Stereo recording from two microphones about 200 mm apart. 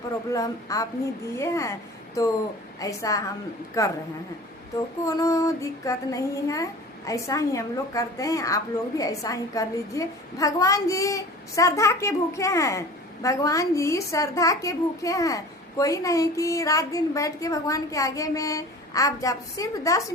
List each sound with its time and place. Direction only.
0.3 s child singing: 15° left (ahead or behind)
5.0 s child singing: 15° left (ahead or behind)